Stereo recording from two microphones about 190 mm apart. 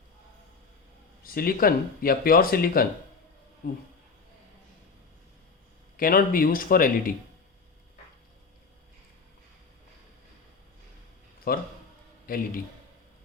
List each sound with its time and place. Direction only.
1.2 s speech: 50° left (ahead or behind)
6.0 s speech: 50° left (ahead or behind)
11.5 s speech: 50° left (ahead or behind)